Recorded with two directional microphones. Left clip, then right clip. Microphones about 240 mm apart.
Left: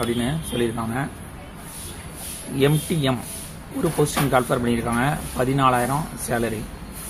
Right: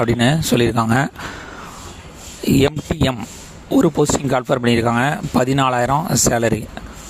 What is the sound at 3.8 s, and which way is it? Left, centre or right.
Speech, right.